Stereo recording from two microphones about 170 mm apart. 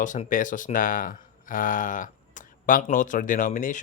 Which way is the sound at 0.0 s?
50° left (ahead or behind).